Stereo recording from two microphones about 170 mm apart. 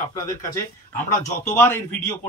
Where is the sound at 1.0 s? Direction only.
45° left (ahead or behind).